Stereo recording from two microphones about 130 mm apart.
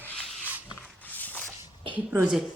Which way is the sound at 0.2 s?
Centre (ahead or behind).